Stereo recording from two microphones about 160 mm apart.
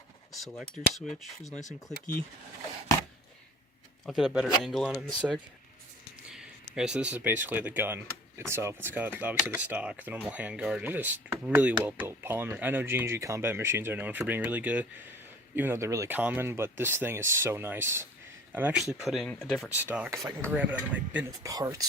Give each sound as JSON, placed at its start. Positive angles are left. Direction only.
{"t": 0.3, "sound": "speech", "side_deg": 0}
{"t": 4.0, "sound": "speech", "side_deg": -5}
{"t": 19.6, "sound": "speech", "side_deg": -10}
{"t": 21.2, "sound": "speech", "side_deg": -25}